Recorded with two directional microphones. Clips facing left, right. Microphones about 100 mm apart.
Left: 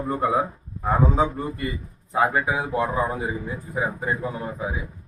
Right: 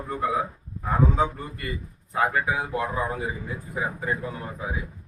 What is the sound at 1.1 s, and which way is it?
Speech, 25° left (ahead or behind).